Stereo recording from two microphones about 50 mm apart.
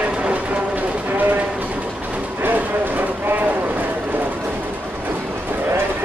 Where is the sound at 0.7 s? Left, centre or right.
Right.